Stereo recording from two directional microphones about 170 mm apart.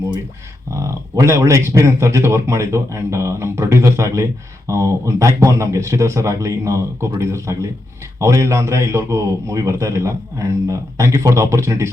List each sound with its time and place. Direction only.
0.7 s speech: 15° right (ahead or behind)